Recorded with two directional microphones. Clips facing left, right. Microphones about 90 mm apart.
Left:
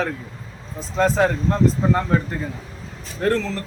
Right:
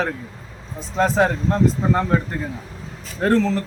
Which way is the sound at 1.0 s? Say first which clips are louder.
Even; 15° right (ahead or behind).